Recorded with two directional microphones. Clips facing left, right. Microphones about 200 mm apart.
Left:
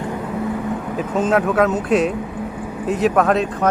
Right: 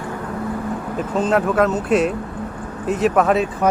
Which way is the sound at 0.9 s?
Centre (ahead or behind).